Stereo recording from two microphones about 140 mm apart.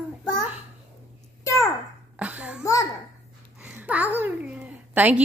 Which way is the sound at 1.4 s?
25° left (ahead or behind).